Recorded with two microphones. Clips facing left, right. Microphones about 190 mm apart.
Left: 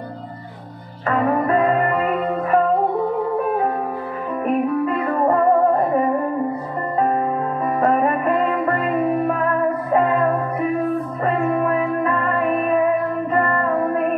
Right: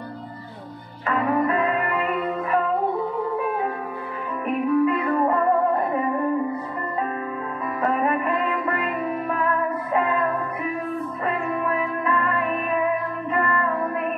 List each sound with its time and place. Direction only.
1.0 s music: 40° left (ahead or behind)
7.0 s music: 40° left (ahead or behind)